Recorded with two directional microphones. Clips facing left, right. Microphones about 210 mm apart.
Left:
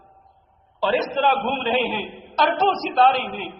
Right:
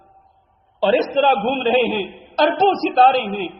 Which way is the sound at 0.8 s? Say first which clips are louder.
Right 5 dB; 30° right (ahead or behind).